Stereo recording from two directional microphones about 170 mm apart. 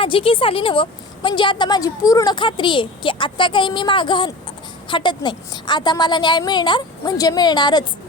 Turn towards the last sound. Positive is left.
turn(degrees=25)  # may be behind; listen again after turning